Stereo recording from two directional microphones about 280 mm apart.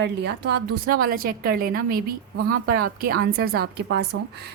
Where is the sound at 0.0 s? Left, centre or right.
Right.